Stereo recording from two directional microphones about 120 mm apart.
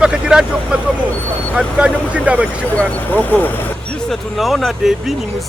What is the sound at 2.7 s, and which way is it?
Speech, 15° left (ahead or behind).